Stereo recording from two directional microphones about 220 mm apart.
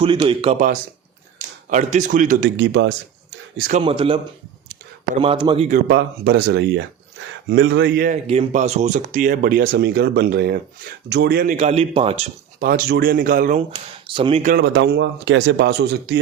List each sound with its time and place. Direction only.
0.0 s speech: 20° right (ahead or behind)
0.5 s speech: 35° right (ahead or behind)
2.4 s speech: 50° right (ahead or behind)
3.8 s speech: 25° right (ahead or behind)
5.2 s speech: 25° right (ahead or behind)
5.6 s speech: 40° right (ahead or behind)
8.3 s speech: 30° right (ahead or behind); by 11.5 s 45° right (ahead or behind)
11.5 s speech: 30° right (ahead or behind)
12.6 s speech: 45° right (ahead or behind)
14.1 s speech: 25° right (ahead or behind)
14.4 s speech: 45° right (ahead or behind)